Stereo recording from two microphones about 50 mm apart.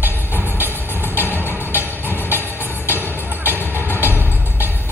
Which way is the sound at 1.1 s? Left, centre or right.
Right.